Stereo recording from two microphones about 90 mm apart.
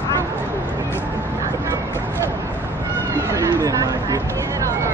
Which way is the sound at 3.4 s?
40° right (ahead or behind).